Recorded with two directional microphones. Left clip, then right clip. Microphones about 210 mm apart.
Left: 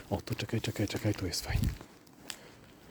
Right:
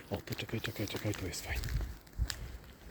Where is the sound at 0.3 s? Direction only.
35° left (ahead or behind).